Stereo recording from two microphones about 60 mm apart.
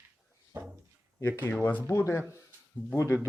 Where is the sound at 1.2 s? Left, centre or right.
Left.